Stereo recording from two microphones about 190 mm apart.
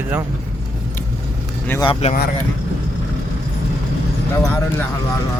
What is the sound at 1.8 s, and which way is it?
Speech, 30° left (ahead or behind).